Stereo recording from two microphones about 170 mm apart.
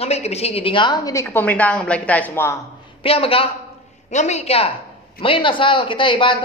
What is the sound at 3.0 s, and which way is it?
A man's voice, 35° left (ahead or behind).